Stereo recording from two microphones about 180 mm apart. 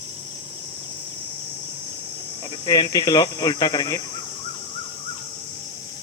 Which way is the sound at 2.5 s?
25° left (ahead or behind).